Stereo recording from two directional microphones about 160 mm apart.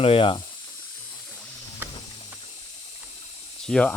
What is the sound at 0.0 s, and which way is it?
Speech, 35° left (ahead or behind).